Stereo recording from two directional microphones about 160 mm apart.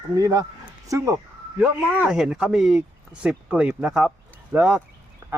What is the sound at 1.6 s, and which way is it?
Speech, 5° right (ahead or behind).